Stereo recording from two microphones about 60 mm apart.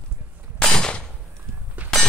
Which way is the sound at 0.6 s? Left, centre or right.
Centre.